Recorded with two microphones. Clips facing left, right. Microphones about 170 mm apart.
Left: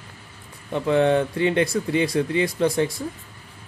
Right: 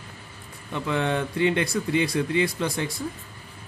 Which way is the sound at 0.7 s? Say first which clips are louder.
Left 7 dB; 35° left (ahead or behind).